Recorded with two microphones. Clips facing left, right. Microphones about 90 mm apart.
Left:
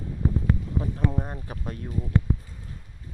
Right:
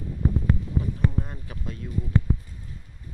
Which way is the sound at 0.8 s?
35° left (ahead or behind).